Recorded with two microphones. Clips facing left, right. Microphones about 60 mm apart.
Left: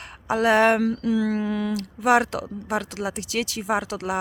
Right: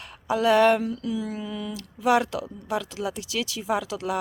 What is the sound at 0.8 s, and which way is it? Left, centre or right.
Speech, left.